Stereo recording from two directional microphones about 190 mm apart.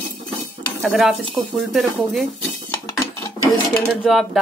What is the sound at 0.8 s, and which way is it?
Stir, centre (ahead or behind).